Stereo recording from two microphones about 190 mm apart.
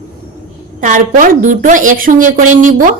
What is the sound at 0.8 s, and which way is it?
A woman's voice, 40° right (ahead or behind).